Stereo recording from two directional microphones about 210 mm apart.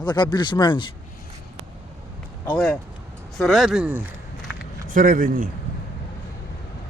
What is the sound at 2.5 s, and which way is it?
Speech, 5° left (ahead or behind).